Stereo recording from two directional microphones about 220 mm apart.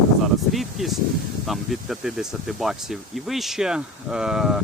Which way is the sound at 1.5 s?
Centre (ahead or behind).